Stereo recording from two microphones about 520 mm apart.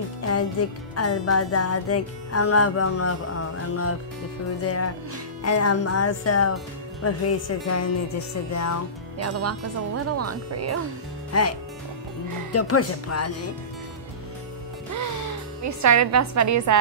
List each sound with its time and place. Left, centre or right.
0.2 s music: left
9.2 s speech: right
11.3 s music: left
12.5 s music: left
15.6 s a woman's voice: right